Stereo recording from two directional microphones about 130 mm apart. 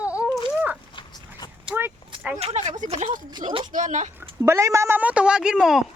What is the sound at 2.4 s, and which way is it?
Speech, 50° right (ahead or behind).